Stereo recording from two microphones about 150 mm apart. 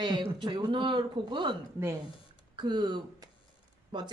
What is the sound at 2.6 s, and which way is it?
Speech, 30° right (ahead or behind).